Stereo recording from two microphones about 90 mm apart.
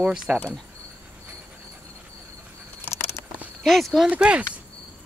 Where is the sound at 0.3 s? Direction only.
15° right (ahead or behind).